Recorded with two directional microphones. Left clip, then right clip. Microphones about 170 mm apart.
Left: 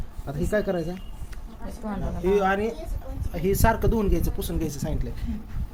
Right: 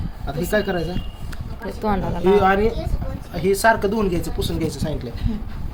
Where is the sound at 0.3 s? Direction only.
30° left (ahead or behind).